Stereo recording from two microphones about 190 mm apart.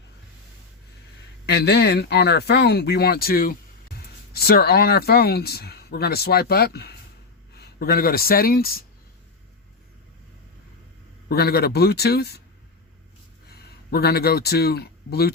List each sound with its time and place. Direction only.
1.5 s speech: 60° left (ahead or behind)
11.3 s speech: 55° left (ahead or behind)
13.5 s speech: 55° left (ahead or behind)